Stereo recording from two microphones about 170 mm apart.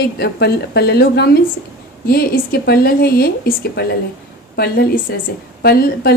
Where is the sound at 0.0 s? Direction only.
70° left (ahead or behind).